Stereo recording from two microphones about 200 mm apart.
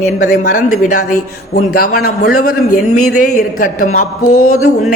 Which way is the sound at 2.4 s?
90° left.